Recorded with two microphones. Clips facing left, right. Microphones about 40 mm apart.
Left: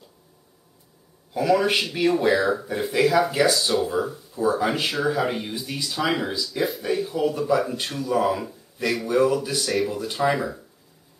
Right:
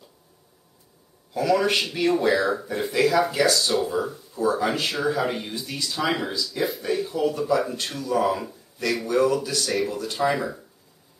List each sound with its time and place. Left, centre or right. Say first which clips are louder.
1.3 s speech: left 1 dB; centre
9.7 s speech: left 2 dB; centre